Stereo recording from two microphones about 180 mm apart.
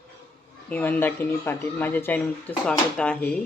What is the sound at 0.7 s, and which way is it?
Speech, 10° left (ahead or behind).